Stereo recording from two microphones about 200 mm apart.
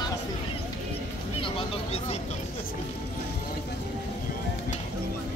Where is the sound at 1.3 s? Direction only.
25° left (ahead or behind).